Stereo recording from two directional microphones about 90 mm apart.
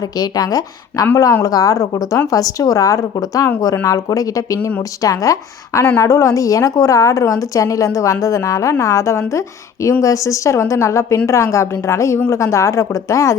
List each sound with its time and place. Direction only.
0.0 s a woman's voice: 45° left (ahead or behind)